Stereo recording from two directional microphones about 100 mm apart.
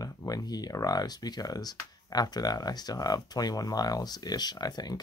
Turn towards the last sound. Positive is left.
turn(degrees=45)  # may be behind; listen again after turning